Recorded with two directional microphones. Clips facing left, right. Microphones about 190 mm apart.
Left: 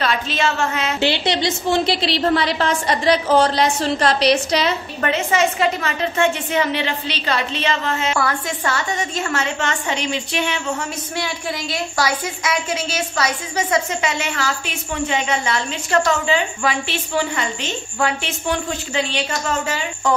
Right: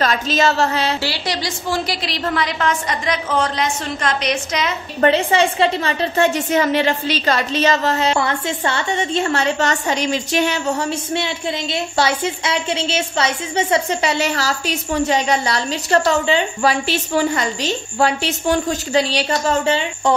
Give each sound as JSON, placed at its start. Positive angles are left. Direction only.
{"t": 0.0, "sound": "speech", "side_deg": -40}
{"t": 1.0, "sound": "a woman's voice", "side_deg": 25}
{"t": 5.0, "sound": "speech", "side_deg": -30}
{"t": 8.2, "sound": "speech", "side_deg": -25}
{"t": 11.1, "sound": "speech", "side_deg": -25}